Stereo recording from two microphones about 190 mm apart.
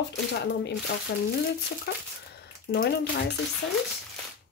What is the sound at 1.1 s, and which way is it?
Speech, 65° left (ahead or behind).